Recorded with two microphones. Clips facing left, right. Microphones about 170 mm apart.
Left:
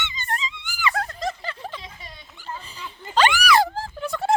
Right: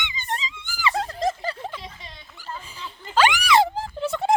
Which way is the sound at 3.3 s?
25° right (ahead or behind).